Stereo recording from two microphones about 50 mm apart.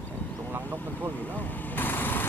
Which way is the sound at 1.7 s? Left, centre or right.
Left.